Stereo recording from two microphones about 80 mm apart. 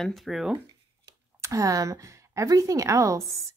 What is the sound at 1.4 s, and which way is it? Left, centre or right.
Speech, right.